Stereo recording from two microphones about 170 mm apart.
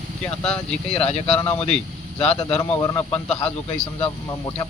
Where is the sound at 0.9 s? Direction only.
35° left (ahead or behind).